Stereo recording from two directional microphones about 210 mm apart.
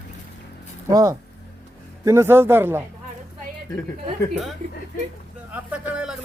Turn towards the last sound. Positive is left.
turn(degrees=-5)  # may be behind; listen again after turning